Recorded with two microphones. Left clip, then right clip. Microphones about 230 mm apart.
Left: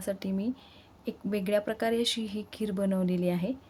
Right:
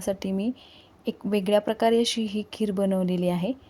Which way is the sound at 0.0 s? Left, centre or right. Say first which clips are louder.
Right 5 dB; centre.